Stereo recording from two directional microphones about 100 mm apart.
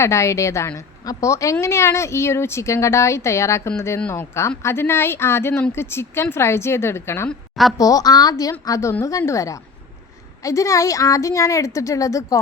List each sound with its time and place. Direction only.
0.0 s a woman's voice: 30° left (ahead or behind)
7.3 s a woman's voice: centre (ahead or behind)
7.8 s a woman's voice: 35° left (ahead or behind)